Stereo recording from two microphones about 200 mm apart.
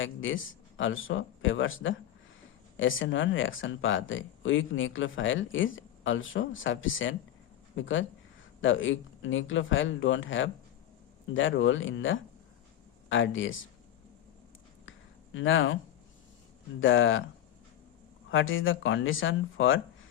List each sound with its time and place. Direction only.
0.0 s speech: 75° left (ahead or behind)
14.8 s a sound: 75° left (ahead or behind)
16.8 s speech: 75° left (ahead or behind)
18.3 s speech: 75° left (ahead or behind)